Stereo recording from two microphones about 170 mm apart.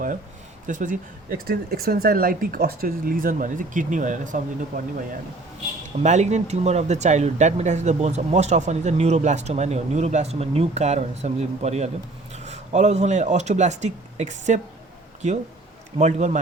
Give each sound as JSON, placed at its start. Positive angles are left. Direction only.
{"t": 0.7, "sound": "speech", "side_deg": -50}
{"t": 6.0, "sound": "speech", "side_deg": -40}
{"t": 16.0, "sound": "a man's voice", "side_deg": -45}